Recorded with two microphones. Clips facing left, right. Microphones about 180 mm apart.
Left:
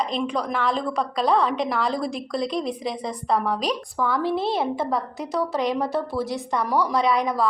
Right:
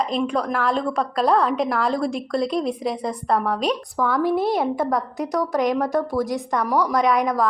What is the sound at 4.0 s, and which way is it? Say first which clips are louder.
A woman's voice: right 3 dB; 15° right (ahead or behind).